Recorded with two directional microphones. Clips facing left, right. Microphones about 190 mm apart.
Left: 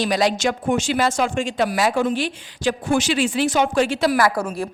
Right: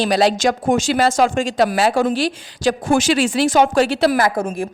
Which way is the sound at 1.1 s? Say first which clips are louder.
Right 5 dB; 90° right.